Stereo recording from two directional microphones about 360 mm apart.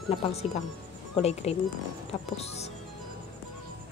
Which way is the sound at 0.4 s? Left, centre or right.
Centre.